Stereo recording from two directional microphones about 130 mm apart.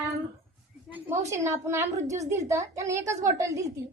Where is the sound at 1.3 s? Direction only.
25° right (ahead or behind).